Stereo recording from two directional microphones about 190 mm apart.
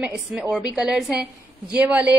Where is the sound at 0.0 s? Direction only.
5° right (ahead or behind).